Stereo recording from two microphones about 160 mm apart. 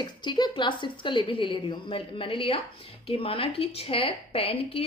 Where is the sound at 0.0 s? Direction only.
30° left (ahead or behind).